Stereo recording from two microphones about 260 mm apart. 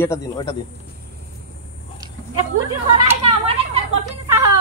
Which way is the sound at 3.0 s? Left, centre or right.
Right.